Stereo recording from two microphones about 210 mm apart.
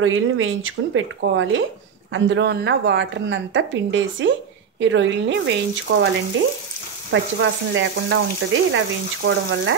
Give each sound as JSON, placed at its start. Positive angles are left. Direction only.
{"t": 0.0, "sound": "a woman's voice", "side_deg": -75}
{"t": 7.1, "sound": "a woman's voice", "side_deg": -65}